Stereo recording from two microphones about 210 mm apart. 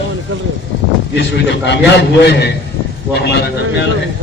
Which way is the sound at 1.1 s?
55° left (ahead or behind).